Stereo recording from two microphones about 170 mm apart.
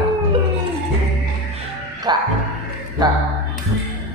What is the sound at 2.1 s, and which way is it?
Speech, 25° right (ahead or behind).